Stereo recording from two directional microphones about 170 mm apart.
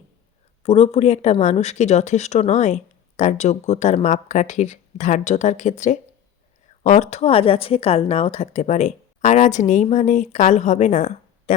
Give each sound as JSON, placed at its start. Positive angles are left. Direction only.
{"t": 0.6, "sound": "speech", "side_deg": 40}